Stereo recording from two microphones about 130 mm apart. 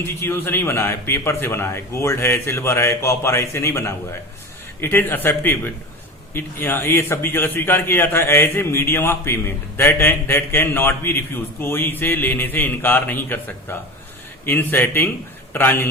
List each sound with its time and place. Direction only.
0.0 s a man's voice: 15° left (ahead or behind)